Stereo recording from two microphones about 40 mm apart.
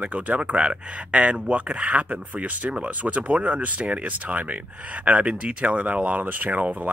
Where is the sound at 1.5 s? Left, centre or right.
Right.